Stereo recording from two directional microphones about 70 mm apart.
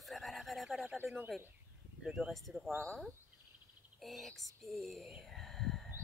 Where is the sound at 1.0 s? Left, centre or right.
Right.